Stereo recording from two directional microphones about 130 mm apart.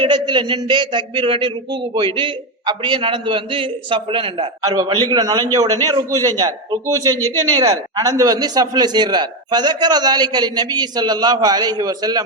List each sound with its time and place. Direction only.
0.0 s a man's voice: 35° right (ahead or behind)